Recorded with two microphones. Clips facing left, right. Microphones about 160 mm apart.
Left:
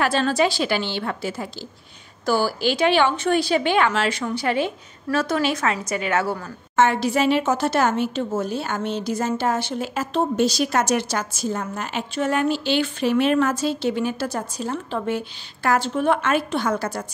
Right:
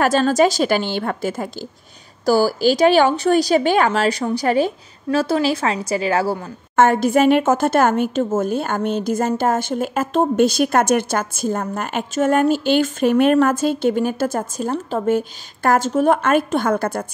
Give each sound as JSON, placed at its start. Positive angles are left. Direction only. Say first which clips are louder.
{"t": 0.0, "sound": "a woman's voice", "louder": "right 5 dB", "side_deg": -45}
{"t": 6.8, "sound": "a woman's voice", "louder": "right 5 dB", "side_deg": -50}